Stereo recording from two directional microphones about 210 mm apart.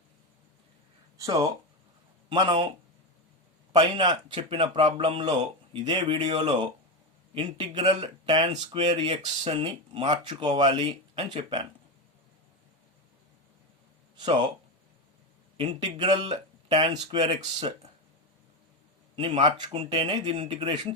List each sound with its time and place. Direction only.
1.2 s speech: 15° right (ahead or behind)
14.2 s speech: 20° right (ahead or behind)
15.5 s speech: 20° right (ahead or behind)
19.1 s speech: 25° right (ahead or behind)